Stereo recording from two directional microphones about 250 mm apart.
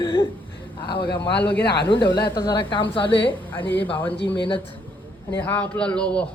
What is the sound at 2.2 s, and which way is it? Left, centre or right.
Speech, centre.